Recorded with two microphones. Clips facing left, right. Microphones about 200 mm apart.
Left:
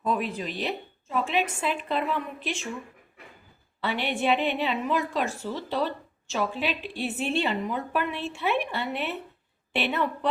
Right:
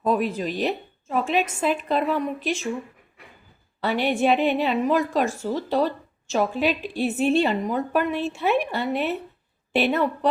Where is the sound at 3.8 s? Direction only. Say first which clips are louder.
Right 6 dB; 40° right (ahead or behind).